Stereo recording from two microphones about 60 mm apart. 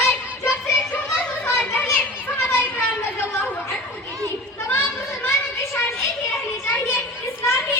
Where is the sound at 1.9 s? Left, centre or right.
Left.